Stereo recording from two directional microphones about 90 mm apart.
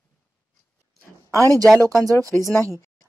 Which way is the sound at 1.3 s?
40° right (ahead or behind).